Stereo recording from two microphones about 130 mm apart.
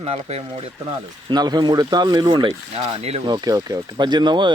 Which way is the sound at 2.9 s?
50° right (ahead or behind).